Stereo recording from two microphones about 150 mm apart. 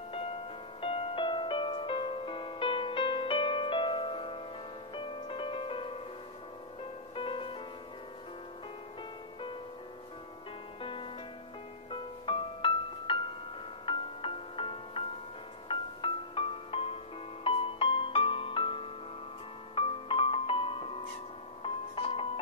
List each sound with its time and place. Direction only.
0.7 s music: 40° left (ahead or behind)
10.8 s music: 35° left (ahead or behind)